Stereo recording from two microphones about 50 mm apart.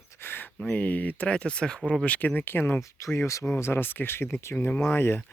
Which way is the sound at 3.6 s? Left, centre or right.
Left.